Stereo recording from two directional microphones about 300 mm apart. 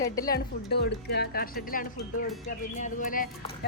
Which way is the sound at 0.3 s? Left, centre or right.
Left.